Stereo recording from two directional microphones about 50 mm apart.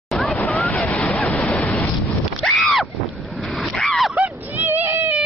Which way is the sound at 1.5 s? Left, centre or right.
Left.